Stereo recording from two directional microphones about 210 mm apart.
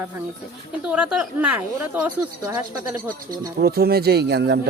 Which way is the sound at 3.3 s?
45° right (ahead or behind).